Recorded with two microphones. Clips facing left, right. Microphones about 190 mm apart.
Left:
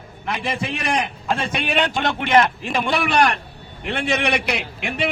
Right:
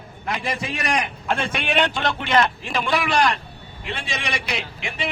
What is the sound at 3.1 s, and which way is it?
A man's voice, 65° left (ahead or behind).